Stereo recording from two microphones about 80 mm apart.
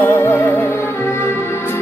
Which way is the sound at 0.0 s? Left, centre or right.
Left.